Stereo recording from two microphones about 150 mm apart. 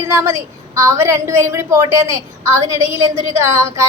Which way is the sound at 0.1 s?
20° right (ahead or behind).